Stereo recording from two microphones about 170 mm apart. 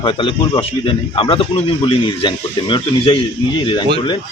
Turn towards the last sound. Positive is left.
turn(degrees=30)  # may be behind; listen again after turning